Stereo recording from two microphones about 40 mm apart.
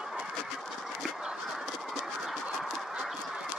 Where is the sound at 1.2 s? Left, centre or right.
Centre.